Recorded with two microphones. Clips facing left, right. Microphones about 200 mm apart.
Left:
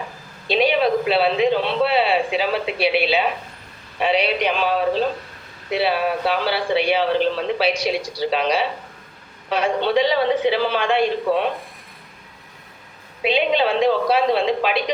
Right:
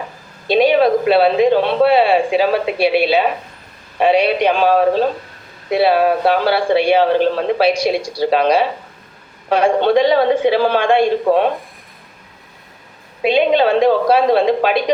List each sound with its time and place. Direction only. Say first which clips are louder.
0.4 s a man's voice: right 6 dB; 45° right (ahead or behind)
13.2 s a man's voice: right 6 dB; 45° right (ahead or behind)